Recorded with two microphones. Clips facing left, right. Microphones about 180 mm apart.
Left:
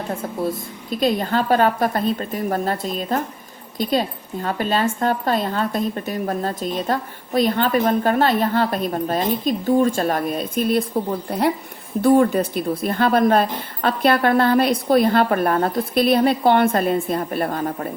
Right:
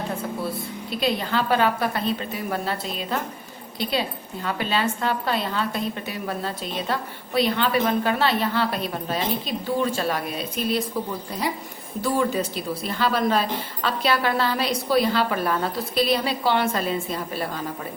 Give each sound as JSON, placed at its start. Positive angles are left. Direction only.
{"t": 0.4, "sound": "a woman's voice", "side_deg": 45}